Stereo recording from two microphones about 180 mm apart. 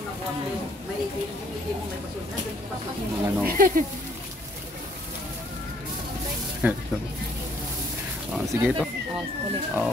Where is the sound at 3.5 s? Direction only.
50° right (ahead or behind).